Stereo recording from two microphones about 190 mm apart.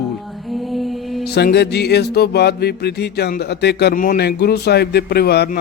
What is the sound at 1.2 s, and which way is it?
Music, 60° left (ahead or behind).